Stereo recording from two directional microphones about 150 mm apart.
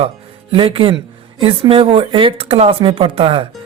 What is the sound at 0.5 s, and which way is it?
Speech, 35° right (ahead or behind).